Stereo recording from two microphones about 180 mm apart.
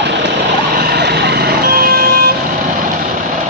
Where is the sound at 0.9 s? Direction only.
65° right (ahead or behind).